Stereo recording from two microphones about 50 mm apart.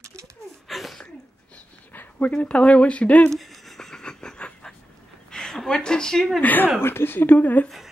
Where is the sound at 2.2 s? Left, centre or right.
Left.